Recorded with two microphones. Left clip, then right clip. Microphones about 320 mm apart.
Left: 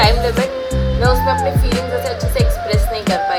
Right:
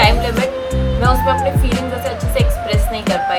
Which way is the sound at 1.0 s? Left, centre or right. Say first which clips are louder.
Even; centre.